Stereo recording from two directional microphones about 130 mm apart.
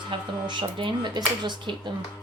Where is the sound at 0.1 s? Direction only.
40° right (ahead or behind).